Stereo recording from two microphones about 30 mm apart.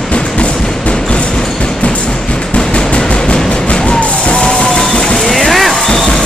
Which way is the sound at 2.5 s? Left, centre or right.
Left.